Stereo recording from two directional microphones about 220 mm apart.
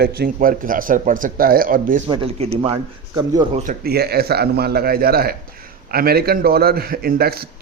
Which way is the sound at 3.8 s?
45° right (ahead or behind).